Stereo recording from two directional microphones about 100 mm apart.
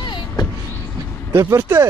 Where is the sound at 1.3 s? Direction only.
25° right (ahead or behind).